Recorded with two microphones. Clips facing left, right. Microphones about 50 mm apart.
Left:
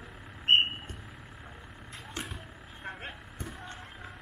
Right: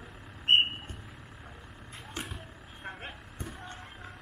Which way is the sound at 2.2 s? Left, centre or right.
Centre.